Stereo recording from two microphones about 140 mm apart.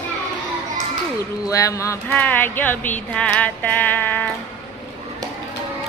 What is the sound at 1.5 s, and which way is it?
Speech, 25° left (ahead or behind).